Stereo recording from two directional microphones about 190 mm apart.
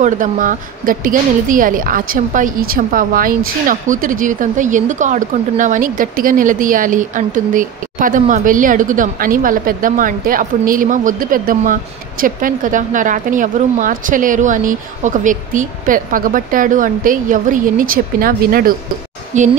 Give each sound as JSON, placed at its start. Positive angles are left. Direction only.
{"t": 0.0, "sound": "a woman's voice", "side_deg": -45}